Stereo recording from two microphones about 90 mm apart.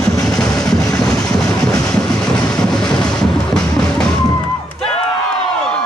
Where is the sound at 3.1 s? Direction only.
5° left (ahead or behind).